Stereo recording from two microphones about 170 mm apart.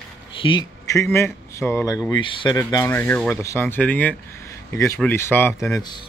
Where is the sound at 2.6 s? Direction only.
20° left (ahead or behind).